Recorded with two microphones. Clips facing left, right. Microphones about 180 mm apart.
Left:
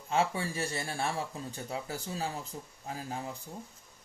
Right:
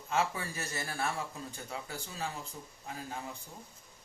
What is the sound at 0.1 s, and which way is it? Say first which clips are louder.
Speech: left 3 dB; 30° left (ahead or behind).